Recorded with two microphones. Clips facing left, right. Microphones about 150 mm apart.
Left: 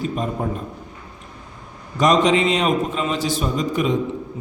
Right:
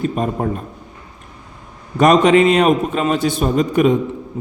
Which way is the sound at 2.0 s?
55° right (ahead or behind).